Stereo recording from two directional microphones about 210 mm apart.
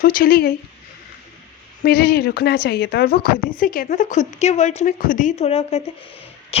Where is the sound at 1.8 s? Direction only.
45° left (ahead or behind); by 5.8 s 30° left (ahead or behind).